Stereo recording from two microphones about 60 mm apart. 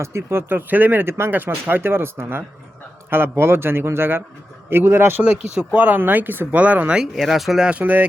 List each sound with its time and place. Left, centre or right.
0.0 s speech: right
5.2 s speech: right
7.2 s speech: centre
7.6 s speech: right